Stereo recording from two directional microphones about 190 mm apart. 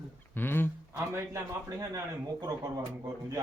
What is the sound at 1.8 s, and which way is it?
Speech, 20° right (ahead or behind).